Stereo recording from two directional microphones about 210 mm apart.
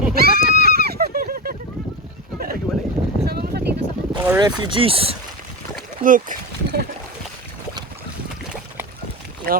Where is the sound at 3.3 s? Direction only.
50° right (ahead or behind).